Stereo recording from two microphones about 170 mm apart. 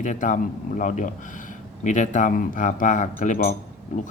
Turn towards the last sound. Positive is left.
turn(degrees=45)  # may be behind; listen again after turning